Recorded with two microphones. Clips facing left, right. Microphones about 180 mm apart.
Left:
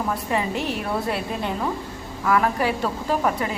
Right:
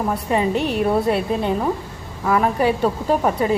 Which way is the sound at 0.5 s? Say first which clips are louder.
Right 5 dB; 60° right (ahead or behind).